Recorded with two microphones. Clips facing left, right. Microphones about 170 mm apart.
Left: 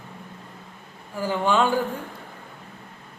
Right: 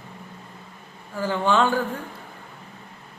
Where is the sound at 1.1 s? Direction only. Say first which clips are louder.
Right 1 dB; 10° left (ahead or behind).